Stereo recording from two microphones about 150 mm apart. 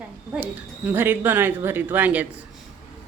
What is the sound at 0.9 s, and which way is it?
A woman's voice, 10° right (ahead or behind).